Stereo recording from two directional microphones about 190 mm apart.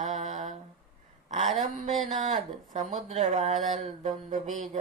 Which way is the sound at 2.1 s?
40° right (ahead or behind).